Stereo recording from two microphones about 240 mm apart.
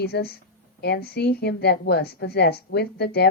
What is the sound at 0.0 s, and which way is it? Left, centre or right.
A woman's voice, left.